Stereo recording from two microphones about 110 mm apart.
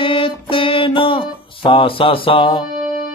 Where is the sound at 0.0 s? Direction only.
55° left (ahead or behind).